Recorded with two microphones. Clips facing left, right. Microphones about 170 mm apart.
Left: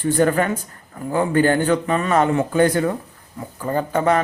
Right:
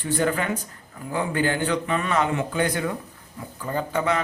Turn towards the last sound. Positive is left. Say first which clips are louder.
# left 6 dB
turn(degrees=45)  # may be behind; listen again after turning